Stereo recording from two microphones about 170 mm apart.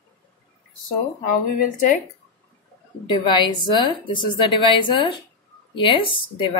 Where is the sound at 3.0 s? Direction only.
25° left (ahead or behind).